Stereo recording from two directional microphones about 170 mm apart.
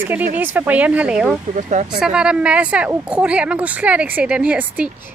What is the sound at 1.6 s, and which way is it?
Speech, 45° right (ahead or behind).